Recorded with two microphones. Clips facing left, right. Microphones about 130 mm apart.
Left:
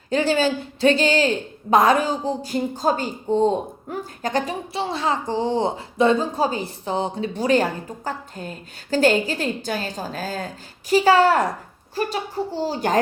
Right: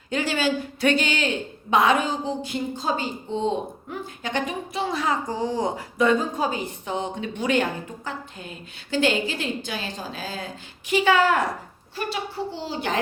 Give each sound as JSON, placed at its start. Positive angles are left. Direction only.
{"t": 0.1, "sound": "a woman's voice", "side_deg": 30}